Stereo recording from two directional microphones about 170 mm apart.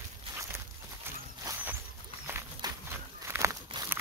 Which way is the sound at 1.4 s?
15° right (ahead or behind).